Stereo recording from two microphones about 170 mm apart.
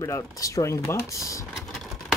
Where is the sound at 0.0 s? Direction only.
20° left (ahead or behind).